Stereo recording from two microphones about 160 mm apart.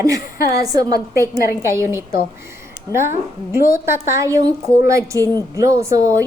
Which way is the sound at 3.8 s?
20° right (ahead or behind).